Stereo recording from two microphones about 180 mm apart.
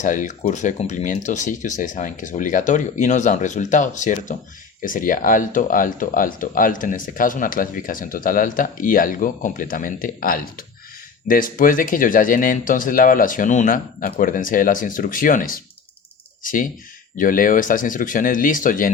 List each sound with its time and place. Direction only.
0.0 s speech: 45° left (ahead or behind)